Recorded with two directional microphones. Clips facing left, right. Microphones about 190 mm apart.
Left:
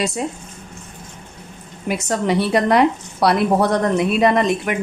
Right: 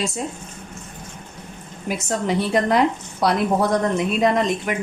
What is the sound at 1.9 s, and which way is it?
A woman's voice, 70° left (ahead or behind).